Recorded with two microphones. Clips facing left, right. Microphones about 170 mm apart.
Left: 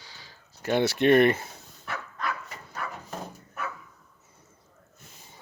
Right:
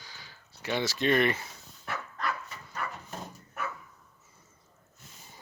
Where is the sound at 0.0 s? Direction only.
30° left (ahead or behind).